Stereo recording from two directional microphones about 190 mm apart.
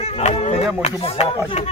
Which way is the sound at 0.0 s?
35° left (ahead or behind).